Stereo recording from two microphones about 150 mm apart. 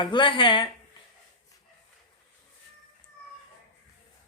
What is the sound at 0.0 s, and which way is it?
Speech, 35° left (ahead or behind).